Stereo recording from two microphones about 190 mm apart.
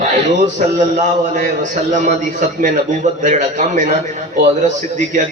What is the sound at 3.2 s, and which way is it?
Speech, 40° right (ahead or behind).